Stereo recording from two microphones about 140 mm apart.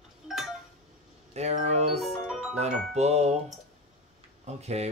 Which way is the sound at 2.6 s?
50° right (ahead or behind).